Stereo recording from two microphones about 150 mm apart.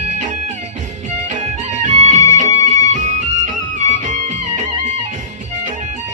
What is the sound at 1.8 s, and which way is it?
Music, 55° right (ahead or behind).